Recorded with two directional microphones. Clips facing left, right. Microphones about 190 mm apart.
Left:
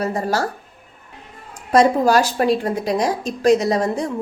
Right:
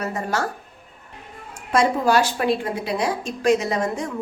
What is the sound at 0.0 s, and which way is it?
Speech, 35° left (ahead or behind).